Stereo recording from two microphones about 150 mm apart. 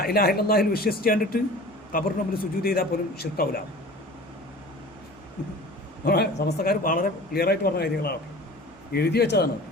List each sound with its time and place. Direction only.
0.0 s a man's voice: 90° left
6.1 s speech: 90° left